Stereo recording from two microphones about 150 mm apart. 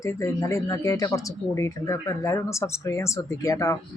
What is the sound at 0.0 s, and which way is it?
Speech, 20° left (ahead or behind).